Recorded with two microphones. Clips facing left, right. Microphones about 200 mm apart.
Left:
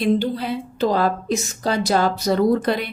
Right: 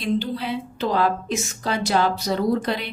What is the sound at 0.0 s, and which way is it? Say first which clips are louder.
A woman's voice: left 4 dB; 45° left (ahead or behind).